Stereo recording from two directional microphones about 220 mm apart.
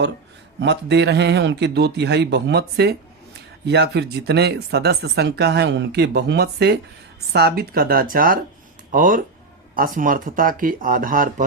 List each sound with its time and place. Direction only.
0.6 s speech: 50° right (ahead or behind)